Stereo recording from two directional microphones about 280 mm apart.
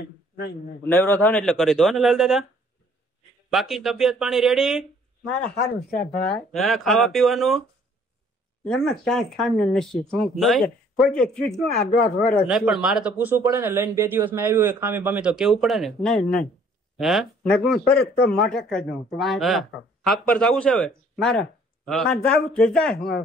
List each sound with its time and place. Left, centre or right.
0.8 s speech: centre
3.4 s speech: centre
5.6 s speech: left
6.3 s speech: centre
8.6 s speech: centre